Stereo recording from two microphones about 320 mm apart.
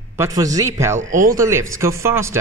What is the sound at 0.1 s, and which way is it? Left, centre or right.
Speech, centre.